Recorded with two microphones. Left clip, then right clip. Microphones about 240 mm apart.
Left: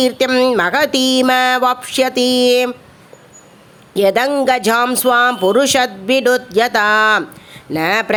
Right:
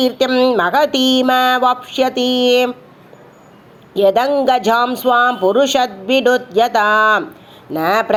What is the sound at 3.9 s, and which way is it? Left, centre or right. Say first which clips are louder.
Speech: right 1 dB; left.